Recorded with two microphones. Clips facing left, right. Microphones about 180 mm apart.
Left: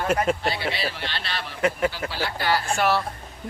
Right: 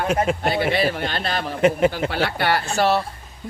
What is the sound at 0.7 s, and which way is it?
Speech, 55° right (ahead or behind).